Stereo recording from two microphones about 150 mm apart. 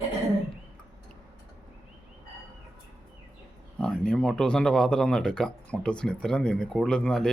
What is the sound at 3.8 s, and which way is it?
Speech, 5° left (ahead or behind).